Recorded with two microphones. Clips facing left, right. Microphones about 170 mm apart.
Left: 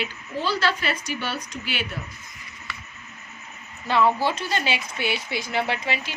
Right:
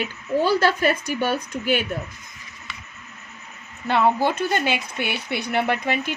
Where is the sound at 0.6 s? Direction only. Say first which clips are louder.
Right 6 dB; 50° right (ahead or behind).